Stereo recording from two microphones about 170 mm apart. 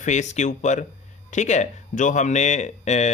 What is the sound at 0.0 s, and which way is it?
Speech, 45° left (ahead or behind).